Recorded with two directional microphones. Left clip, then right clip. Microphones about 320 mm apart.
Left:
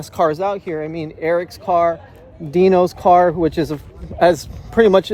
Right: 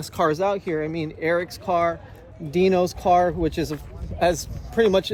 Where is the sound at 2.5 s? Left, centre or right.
Left.